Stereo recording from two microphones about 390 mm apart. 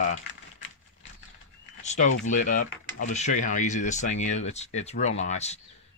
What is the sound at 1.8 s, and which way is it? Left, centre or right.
Speech, centre.